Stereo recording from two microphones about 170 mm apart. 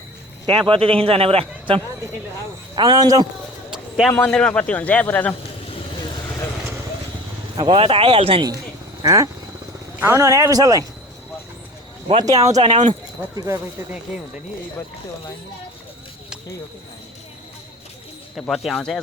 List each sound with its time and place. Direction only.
0.7 s a man's voice: 35° right (ahead or behind)
2.7 s speech: 25° right (ahead or behind)
3.7 s a sound: 5° right (ahead or behind)
4.1 s a man's voice: 10° left (ahead or behind)
7.5 s a man's voice: 30° right (ahead or behind)
9.0 s vehicle: 20° right (ahead or behind)
10.0 s speech: 15° right (ahead or behind)
12.2 s speech: 20° right (ahead or behind)
12.5 s a man's voice: 40° right (ahead or behind)
13.3 s speech: 20° right (ahead or behind)
18.3 s speech: centre (ahead or behind)